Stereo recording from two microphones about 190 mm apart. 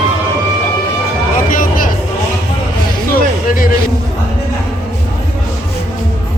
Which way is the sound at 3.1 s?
50° left (ahead or behind).